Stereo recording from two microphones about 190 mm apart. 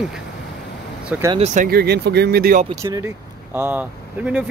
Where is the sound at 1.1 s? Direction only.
10° right (ahead or behind).